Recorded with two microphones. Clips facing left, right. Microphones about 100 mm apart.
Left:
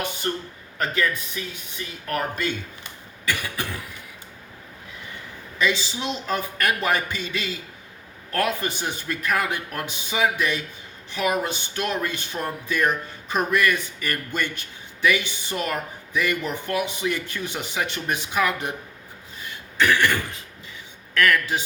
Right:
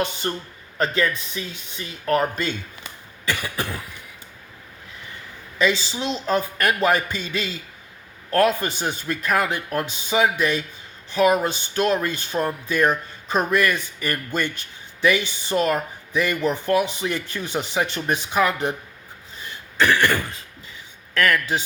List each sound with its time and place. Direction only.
0.2 s speech: 25° right (ahead or behind)
5.5 s speech: 35° right (ahead or behind)
19.4 s a sound: 30° right (ahead or behind)
21.2 s speech: 35° right (ahead or behind)